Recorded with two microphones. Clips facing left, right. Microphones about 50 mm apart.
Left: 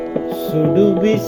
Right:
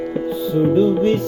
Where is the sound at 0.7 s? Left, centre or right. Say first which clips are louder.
Left 3 dB; left.